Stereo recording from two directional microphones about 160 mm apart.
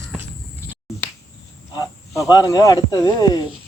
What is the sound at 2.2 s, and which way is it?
Speech, 25° left (ahead or behind).